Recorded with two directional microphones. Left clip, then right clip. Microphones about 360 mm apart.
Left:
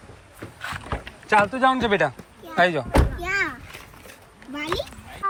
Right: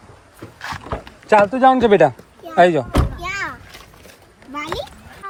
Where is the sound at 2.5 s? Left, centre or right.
Right.